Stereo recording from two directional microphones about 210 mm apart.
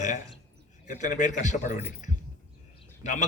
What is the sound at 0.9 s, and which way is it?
Speech, 35° left (ahead or behind).